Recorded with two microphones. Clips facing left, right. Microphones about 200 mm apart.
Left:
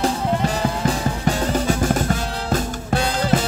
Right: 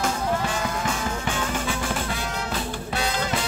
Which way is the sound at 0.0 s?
35° left (ahead or behind).